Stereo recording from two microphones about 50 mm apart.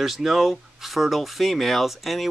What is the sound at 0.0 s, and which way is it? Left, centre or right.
A man's voice, centre.